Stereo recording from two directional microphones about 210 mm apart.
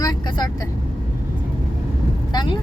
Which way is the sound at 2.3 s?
20° left (ahead or behind).